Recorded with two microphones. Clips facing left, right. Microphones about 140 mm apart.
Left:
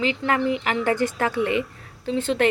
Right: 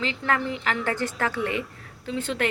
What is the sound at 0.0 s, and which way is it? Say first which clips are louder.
A woman's voice: left 4 dB; 15° left (ahead or behind).